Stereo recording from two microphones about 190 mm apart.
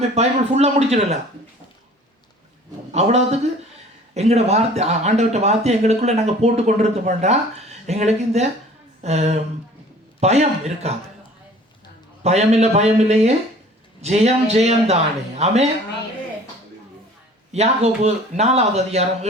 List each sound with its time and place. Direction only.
0.1 s speech: 35° right (ahead or behind)
2.9 s speech: 35° right (ahead or behind)
12.2 s speech: 35° right (ahead or behind)
17.5 s speech: 35° right (ahead or behind)